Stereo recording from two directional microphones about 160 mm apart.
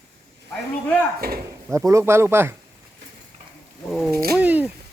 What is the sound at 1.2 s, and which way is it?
Speech, 70° right (ahead or behind).